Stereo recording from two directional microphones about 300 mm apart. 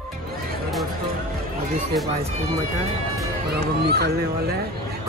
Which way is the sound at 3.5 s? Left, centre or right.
Right.